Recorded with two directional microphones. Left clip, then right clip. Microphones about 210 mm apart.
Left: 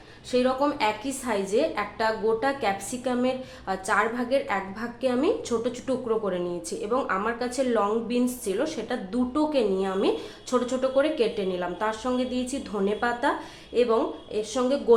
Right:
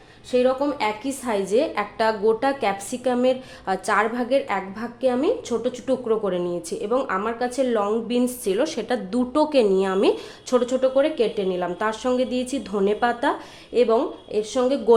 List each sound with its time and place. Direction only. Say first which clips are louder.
0.3 s a woman's voice: right 3 dB; 25° right (ahead or behind)